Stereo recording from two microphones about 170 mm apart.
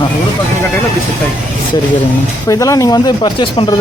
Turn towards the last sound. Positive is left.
turn(degrees=25)  # may be behind; listen again after turning